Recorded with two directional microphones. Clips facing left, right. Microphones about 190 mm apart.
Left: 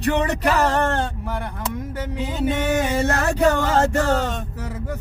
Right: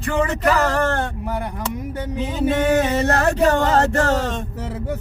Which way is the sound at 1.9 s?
20° right (ahead or behind).